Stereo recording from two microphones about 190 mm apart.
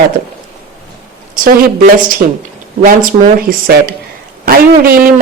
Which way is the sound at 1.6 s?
45° right (ahead or behind).